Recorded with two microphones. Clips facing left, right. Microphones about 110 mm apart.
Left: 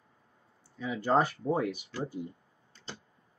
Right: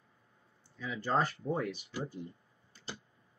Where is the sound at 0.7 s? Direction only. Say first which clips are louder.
Left 5 dB; 20° left (ahead or behind).